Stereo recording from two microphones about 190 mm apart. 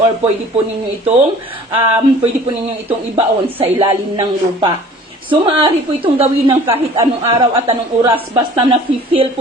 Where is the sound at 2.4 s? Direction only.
30° right (ahead or behind).